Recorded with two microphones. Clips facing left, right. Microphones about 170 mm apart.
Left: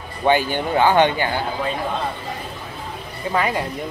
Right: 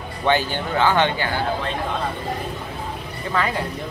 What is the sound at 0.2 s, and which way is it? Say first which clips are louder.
Speech: left 3 dB; 15° left (ahead or behind).